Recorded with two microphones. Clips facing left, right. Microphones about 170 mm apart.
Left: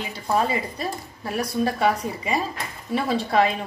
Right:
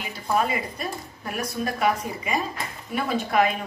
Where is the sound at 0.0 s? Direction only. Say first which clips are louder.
Left 1 dB; 30° left (ahead or behind).